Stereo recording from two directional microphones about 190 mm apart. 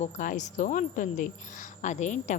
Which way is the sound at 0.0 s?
40° left (ahead or behind).